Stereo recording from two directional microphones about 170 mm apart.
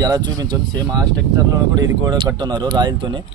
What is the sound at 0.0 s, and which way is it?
Speech, 20° right (ahead or behind).